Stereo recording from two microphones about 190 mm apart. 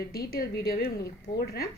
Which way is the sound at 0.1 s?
55° left (ahead or behind).